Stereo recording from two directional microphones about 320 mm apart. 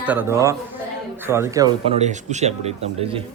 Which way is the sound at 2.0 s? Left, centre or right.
Right.